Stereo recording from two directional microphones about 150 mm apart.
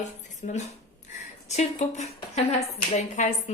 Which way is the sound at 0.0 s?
50° left (ahead or behind).